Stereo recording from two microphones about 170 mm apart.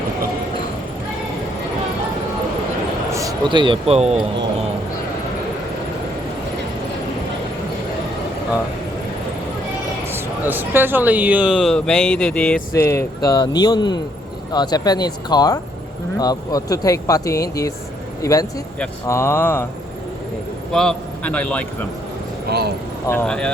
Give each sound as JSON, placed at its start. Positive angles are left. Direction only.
{"t": 3.1, "sound": "speech", "side_deg": -20}
{"t": 10.1, "sound": "a man's voice", "side_deg": -10}
{"t": 20.7, "sound": "a man's voice", "side_deg": 5}
{"t": 22.4, "sound": "speech", "side_deg": -70}
{"t": 23.0, "sound": "speech", "side_deg": 10}